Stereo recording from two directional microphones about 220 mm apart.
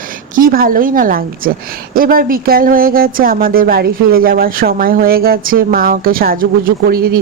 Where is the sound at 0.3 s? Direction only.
40° right (ahead or behind).